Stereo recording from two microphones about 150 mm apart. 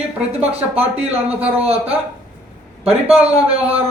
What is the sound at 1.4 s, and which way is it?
Speech, 10° right (ahead or behind).